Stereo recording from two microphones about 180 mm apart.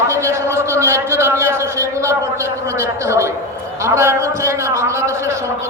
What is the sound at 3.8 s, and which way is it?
A man's voice, 15° right (ahead or behind).